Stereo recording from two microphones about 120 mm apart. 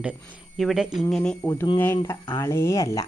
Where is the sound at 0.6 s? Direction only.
Centre (ahead or behind).